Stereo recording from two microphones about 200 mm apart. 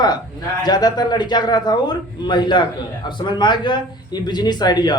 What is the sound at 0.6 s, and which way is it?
Speech, 20° left (ahead or behind).